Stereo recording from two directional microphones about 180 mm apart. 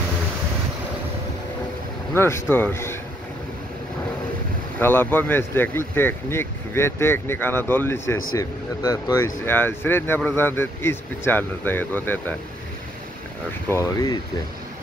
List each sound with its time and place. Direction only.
2.1 s speech: 15° left (ahead or behind)
4.7 s speech: 10° left (ahead or behind)
13.7 s speech: 15° left (ahead or behind)